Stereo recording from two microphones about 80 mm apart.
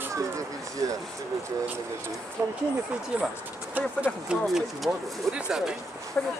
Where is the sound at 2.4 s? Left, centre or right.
Right.